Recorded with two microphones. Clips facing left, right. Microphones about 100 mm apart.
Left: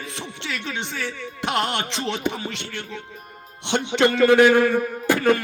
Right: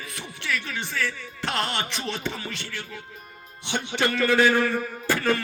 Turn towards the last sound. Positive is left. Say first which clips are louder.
# left 5 dB
turn(degrees=15)  # may be behind; listen again after turning